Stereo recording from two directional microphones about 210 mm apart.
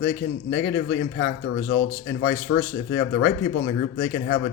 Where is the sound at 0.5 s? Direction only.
60° left (ahead or behind).